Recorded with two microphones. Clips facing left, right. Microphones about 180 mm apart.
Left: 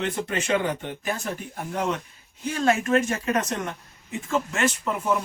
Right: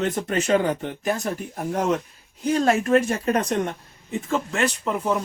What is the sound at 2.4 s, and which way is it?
Speech, 35° right (ahead or behind).